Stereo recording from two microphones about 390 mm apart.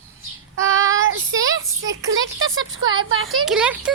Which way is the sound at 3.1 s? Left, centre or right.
Right.